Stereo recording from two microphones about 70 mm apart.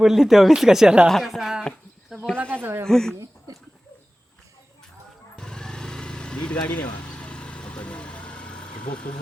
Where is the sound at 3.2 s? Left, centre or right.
Right.